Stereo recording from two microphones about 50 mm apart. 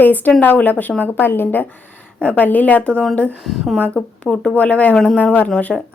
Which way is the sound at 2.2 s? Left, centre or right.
Left.